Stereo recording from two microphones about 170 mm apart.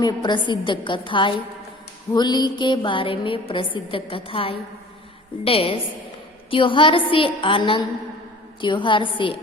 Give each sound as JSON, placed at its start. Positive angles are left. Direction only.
{"t": 0.0, "sound": "a woman's voice", "side_deg": 25}